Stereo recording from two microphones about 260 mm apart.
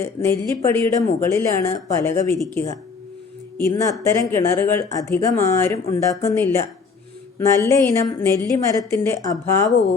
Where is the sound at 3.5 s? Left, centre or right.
Centre.